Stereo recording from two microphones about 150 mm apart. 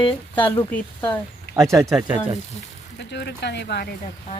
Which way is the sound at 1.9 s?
10° right (ahead or behind).